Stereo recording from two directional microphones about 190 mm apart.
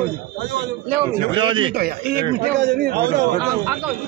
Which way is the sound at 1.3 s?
25° right (ahead or behind).